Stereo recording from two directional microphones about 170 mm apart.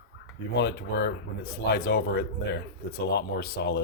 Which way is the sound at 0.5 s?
90° left.